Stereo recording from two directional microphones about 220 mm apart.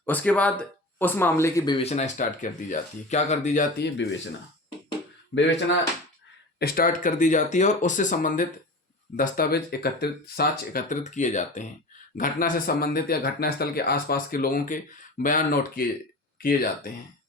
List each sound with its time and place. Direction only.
0.0 s speech: 5° left (ahead or behind); by 3.8 s 35° left (ahead or behind)
5.3 s speech: 55° left (ahead or behind)
6.6 s speech: 45° left (ahead or behind)